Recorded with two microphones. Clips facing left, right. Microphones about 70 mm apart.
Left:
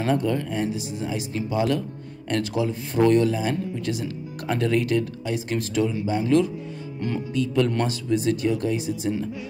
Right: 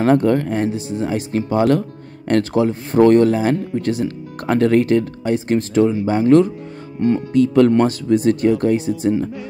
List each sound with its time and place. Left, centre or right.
0.0 s speech: right
0.7 s speech: right